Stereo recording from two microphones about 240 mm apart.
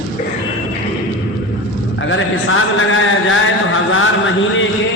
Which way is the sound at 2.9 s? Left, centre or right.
Left.